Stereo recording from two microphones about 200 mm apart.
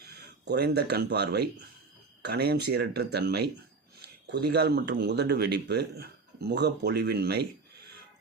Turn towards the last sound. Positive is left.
turn(degrees=-55)  # may be behind; listen again after turning